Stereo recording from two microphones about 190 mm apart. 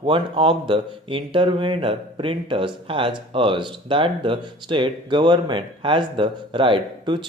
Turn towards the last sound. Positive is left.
turn(degrees=-25)  # may be behind; listen again after turning